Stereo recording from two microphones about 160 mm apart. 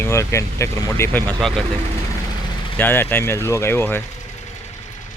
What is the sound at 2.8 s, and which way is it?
Speech, 15° left (ahead or behind).